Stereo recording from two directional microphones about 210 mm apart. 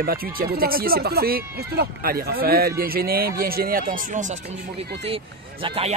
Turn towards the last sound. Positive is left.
turn(degrees=-25)  # may be behind; listen again after turning